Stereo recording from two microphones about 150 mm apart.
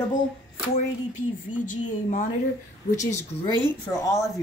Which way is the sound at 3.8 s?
20° left (ahead or behind).